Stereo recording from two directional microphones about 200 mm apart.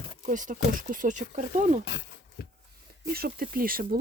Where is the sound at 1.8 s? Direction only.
60° left (ahead or behind).